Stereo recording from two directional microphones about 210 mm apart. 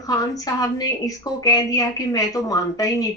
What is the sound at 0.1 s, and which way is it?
Speech, 15° left (ahead or behind).